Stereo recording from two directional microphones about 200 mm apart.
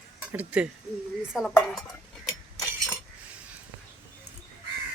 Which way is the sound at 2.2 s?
Centre (ahead or behind).